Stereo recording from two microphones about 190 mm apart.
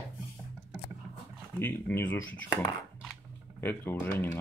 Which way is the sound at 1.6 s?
10° left (ahead or behind).